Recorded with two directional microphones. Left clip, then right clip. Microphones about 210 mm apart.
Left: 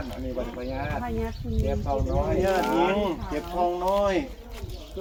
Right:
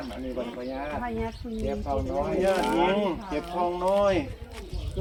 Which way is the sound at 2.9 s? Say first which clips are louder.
Even; 15° right (ahead or behind).